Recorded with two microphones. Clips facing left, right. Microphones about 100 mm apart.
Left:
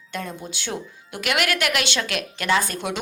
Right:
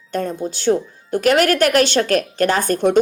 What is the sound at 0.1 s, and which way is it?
Speech, 40° right (ahead or behind).